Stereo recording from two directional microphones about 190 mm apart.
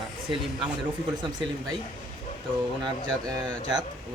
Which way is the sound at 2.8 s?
20° right (ahead or behind).